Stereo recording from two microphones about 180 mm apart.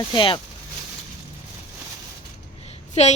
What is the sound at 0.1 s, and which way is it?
Speech, 30° left (ahead or behind).